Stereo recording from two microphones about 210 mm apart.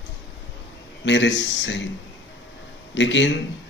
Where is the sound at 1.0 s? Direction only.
60° left (ahead or behind).